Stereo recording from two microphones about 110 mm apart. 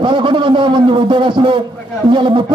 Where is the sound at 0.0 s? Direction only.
50° right (ahead or behind).